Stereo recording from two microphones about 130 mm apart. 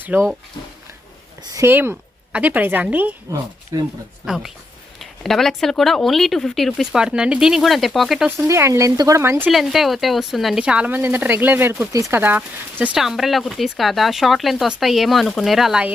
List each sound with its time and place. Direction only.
0.0 s speech: 15° right (ahead or behind)
1.5 s a woman's voice: 15° right (ahead or behind)
4.9 s speech: centre (ahead or behind)
8.4 s speech: 20° right (ahead or behind)
9.5 s speech: centre (ahead or behind)